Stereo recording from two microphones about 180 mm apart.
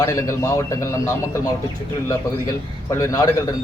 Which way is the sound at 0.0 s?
15° left (ahead or behind).